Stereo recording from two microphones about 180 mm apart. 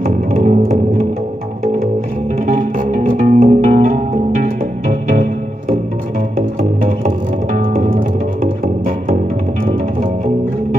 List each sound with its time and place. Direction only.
0.0 s music: 45° right (ahead or behind)
2.4 s music: 45° right (ahead or behind)
7.5 s music: 45° right (ahead or behind)